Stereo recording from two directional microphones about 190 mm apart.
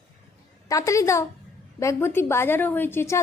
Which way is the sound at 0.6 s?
15° left (ahead or behind).